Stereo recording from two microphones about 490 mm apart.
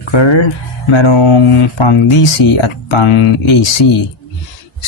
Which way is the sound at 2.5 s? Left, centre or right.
Left.